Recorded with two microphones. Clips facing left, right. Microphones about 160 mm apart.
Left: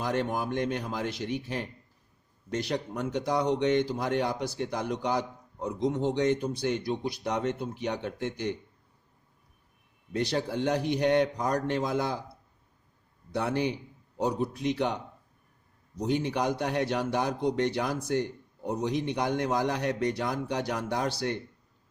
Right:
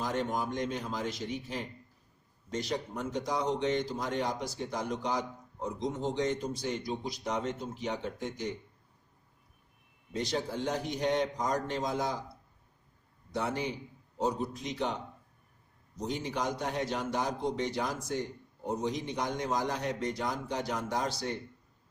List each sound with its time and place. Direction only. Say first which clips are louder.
0.0 s a man's voice: left 3 dB; 65° left (ahead or behind)
10.1 s a man's voice: left 4 dB; 65° left (ahead or behind)
13.3 s a man's voice: left 5 dB; 65° left (ahead or behind)
16.0 s a man's voice: left 6 dB; 65° left (ahead or behind)